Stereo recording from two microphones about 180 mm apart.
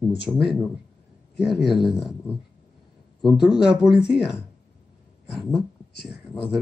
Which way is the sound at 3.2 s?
Centre (ahead or behind).